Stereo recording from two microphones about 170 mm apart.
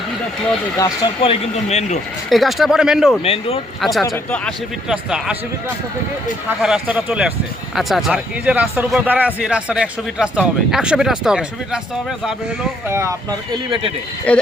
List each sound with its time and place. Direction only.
0.8 s speech: 30° left (ahead or behind)
2.3 s a man's voice: centre (ahead or behind)
3.2 s speech: 35° left (ahead or behind)
3.8 s a man's voice: centre (ahead or behind)
6.6 s a man's voice: 5° right (ahead or behind)
12.9 s speech: 15° right (ahead or behind)
14.3 s speech: 5° left (ahead or behind)